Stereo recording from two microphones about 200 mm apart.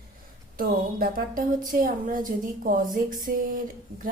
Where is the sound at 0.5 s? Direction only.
45° right (ahead or behind).